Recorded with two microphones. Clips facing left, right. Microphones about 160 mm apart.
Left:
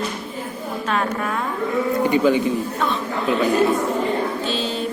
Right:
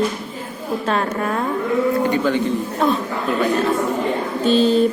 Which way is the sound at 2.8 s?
40° right (ahead or behind).